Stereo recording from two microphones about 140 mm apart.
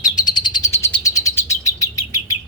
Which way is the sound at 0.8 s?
15° left (ahead or behind).